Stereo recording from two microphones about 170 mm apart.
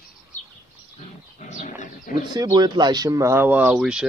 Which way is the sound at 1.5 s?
50° left (ahead or behind).